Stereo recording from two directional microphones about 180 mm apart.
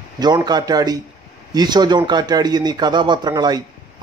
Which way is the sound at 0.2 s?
20° right (ahead or behind).